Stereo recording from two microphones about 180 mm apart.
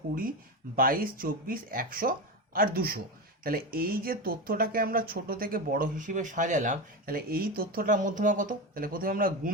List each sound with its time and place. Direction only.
0.8 s speech: 55° right (ahead or behind)